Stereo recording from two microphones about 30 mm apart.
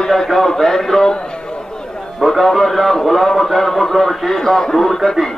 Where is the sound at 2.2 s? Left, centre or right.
Centre.